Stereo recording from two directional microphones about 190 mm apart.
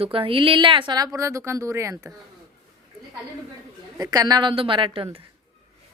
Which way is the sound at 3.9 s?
20° right (ahead or behind).